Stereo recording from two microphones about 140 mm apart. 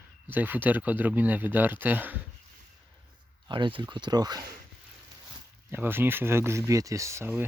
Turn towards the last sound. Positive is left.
turn(degrees=-15)  # may be behind; listen again after turning